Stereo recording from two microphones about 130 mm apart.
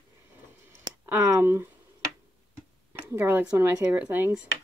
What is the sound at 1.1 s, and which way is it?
Speech, 20° right (ahead or behind).